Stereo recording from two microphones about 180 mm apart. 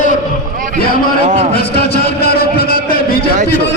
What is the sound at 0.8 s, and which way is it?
Speech, 55° left (ahead or behind).